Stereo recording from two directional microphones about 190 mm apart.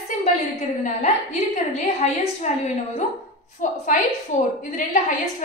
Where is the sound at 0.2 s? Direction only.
35° left (ahead or behind).